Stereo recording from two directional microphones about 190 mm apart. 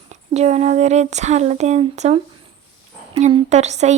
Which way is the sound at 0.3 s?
35° right (ahead or behind).